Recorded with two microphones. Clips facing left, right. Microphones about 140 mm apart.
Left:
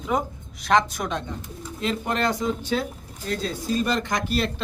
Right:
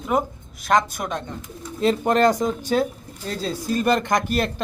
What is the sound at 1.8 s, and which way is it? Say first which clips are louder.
Speech: right 7 dB; 45° right (ahead or behind).